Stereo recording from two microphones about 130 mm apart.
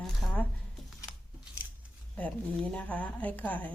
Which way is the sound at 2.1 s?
10° left (ahead or behind).